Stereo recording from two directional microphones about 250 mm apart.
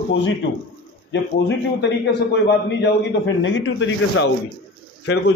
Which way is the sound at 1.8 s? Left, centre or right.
Left.